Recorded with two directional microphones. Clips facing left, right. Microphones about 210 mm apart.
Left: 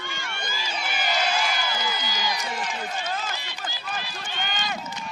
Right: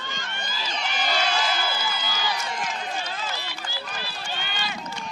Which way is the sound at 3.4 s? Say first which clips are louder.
Right 1 dB; 20° left (ahead or behind).